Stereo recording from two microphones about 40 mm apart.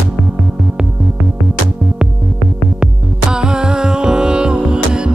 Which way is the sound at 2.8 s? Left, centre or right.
Centre.